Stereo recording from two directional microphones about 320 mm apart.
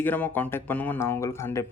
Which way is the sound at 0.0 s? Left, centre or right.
Centre.